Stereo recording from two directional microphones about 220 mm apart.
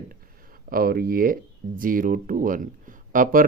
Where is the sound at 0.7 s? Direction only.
40° right (ahead or behind).